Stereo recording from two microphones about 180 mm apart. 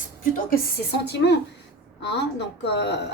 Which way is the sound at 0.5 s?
70° left (ahead or behind).